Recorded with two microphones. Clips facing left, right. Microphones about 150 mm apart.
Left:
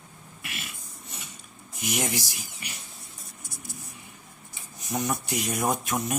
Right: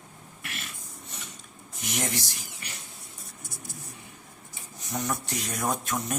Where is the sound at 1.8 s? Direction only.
5° left (ahead or behind).